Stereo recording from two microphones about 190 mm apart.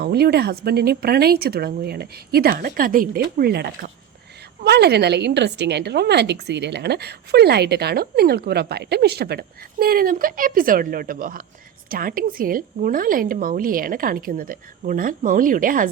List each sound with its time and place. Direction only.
0.0 s a woman's voice: 55° right (ahead or behind)